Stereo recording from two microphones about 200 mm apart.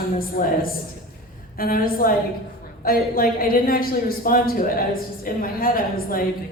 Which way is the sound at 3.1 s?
45° left (ahead or behind).